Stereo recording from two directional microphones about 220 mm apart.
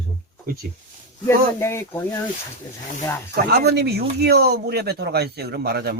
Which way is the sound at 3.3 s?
45° right (ahead or behind).